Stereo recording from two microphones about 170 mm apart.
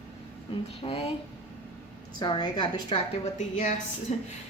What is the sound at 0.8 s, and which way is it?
Speech, 35° left (ahead or behind).